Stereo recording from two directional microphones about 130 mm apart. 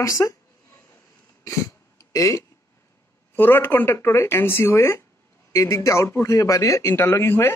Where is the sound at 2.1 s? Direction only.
25° left (ahead or behind).